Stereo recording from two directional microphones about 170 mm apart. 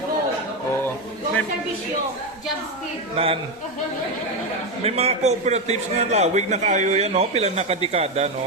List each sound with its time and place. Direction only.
3.2 s a man's voice: 35° right (ahead or behind)
4.8 s a man's voice: 35° right (ahead or behind)